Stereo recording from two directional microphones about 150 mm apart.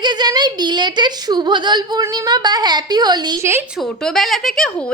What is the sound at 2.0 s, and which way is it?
A woman's voice, 25° right (ahead or behind).